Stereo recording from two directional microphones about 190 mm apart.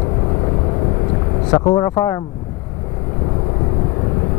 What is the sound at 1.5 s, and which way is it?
Speech, 20° left (ahead or behind).